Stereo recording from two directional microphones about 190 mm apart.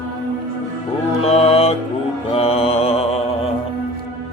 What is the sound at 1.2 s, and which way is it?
Music, 30° left (ahead or behind).